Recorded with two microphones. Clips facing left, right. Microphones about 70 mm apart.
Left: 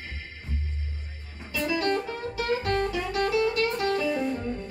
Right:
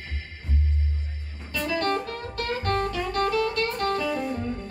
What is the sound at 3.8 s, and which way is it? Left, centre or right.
Music, right.